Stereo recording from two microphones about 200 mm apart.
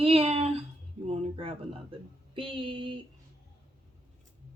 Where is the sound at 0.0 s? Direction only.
30° right (ahead or behind).